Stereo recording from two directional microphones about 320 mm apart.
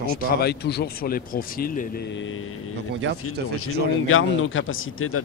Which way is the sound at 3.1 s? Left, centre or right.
Right.